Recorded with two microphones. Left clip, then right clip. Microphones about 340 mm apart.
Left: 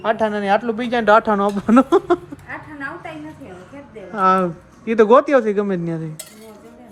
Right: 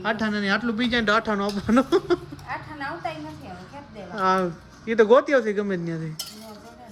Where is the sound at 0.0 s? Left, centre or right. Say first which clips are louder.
Left 7 dB; centre.